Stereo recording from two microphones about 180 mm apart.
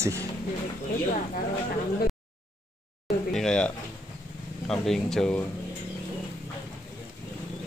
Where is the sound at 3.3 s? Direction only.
5° left (ahead or behind).